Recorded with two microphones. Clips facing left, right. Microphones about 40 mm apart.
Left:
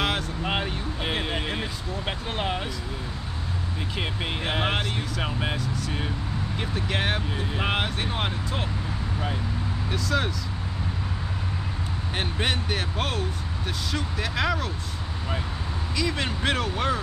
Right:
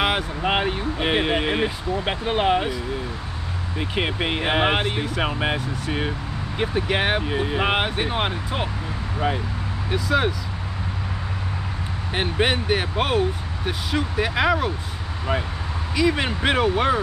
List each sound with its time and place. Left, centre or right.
0.0 s speech: right
3.9 s speech: right
9.8 s speech: centre
12.1 s speech: right
16.0 s speech: centre